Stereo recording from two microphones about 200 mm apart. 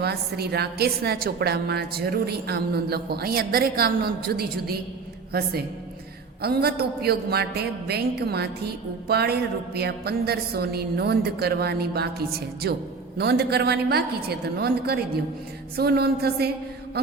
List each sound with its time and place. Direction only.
0.0 s a woman's voice: 55° right (ahead or behind)